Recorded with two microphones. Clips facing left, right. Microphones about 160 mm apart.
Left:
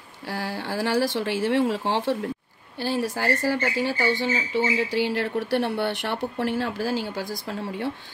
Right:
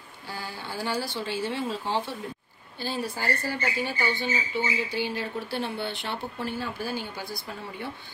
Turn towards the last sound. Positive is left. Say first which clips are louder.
# left 7 dB
turn(degrees=90)